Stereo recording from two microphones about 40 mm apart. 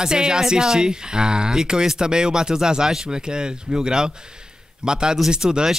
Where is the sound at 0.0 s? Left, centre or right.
Centre.